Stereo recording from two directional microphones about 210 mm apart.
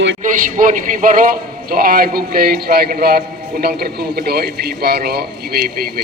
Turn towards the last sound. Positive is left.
turn(degrees=-45)  # may be behind; listen again after turning